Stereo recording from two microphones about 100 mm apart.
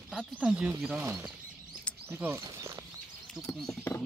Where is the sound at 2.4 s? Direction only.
35° right (ahead or behind).